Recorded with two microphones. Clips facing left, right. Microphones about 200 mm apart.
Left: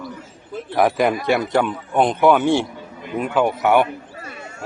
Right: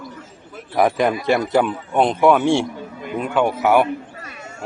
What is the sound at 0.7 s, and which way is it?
A man's voice, centre (ahead or behind).